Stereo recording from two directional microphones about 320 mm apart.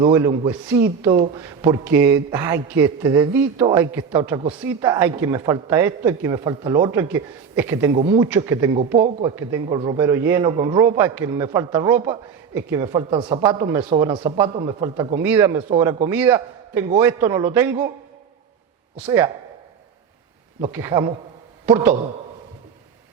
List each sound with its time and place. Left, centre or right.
0.0 s a man's voice: centre
18.9 s a man's voice: centre
20.6 s a man's voice: centre